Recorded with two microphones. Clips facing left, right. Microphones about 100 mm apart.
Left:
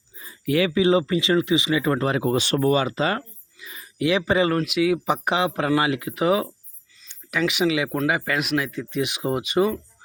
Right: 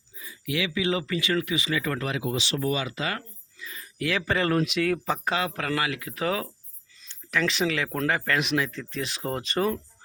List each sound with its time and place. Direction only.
0.2 s speech: 40° left (ahead or behind)
2.1 s speech: 50° left (ahead or behind); by 3.2 s 30° left (ahead or behind)
3.6 s a sound: 20° left (ahead or behind)
4.5 s speech: 5° left (ahead or behind)
5.0 s speech: 20° left (ahead or behind)